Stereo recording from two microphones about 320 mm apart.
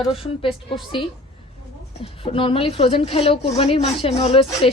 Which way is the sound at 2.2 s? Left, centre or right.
Centre.